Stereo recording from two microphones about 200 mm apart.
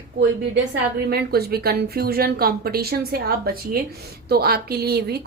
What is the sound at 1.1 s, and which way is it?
Speech, 50° right (ahead or behind).